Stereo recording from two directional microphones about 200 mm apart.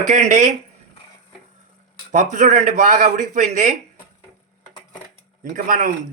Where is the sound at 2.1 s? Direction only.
35° right (ahead or behind).